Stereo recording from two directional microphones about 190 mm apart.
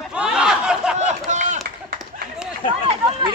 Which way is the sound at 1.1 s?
40° right (ahead or behind).